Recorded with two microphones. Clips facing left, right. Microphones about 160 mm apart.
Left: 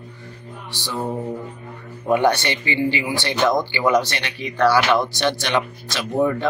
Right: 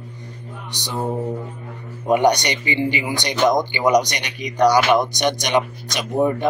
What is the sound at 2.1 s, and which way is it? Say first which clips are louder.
Speech: right 1 dB; 15° right (ahead or behind).